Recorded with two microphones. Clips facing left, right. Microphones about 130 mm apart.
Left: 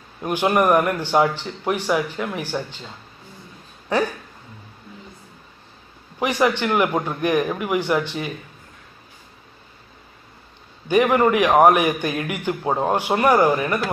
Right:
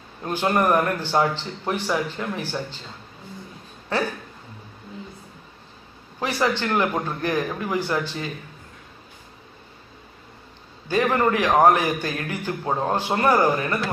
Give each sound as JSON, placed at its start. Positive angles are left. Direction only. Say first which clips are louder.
{"t": 0.2, "sound": "a man's voice", "louder": "left 3 dB", "side_deg": 15}
{"t": 3.9, "sound": "a man's voice", "louder": "left 4 dB", "side_deg": 15}
{"t": 6.1, "sound": "a man's voice", "louder": "left 4 dB", "side_deg": 15}
{"t": 10.9, "sound": "a man's voice", "louder": "left 4 dB", "side_deg": 15}